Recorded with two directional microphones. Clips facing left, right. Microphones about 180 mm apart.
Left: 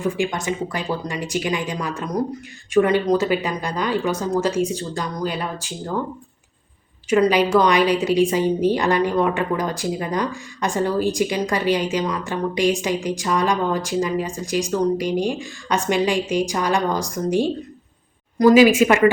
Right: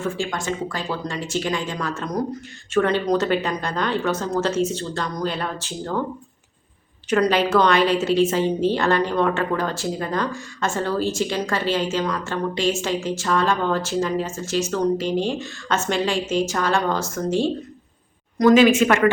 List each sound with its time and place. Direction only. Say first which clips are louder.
0.0 s a woman's voice: left 3 dB; 20° left (ahead or behind)
7.1 s a woman's voice: left 2 dB; 10° left (ahead or behind)